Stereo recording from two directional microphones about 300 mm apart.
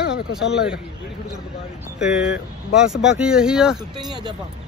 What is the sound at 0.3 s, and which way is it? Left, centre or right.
Speech, centre.